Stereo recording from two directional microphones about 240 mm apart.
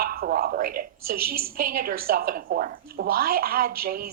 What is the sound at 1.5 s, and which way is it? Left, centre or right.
Speech, right.